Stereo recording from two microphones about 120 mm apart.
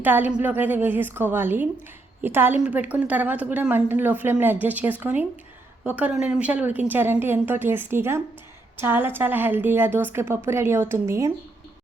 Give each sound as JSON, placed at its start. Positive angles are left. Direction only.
{"t": 0.0, "sound": "a woman's voice", "side_deg": -15}